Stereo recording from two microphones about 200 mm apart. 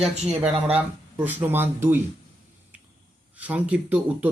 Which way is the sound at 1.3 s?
10° right (ahead or behind).